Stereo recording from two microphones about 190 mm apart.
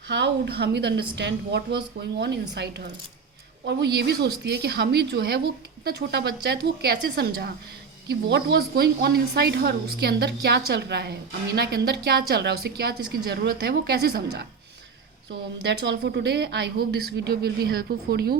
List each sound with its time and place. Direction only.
0.1 s a woman's voice: 60° right (ahead or behind)
15.6 s a woman's voice: 60° right (ahead or behind)